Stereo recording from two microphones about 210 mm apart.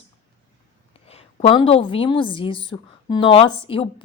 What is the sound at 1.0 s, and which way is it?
A woman's voice, 25° left (ahead or behind).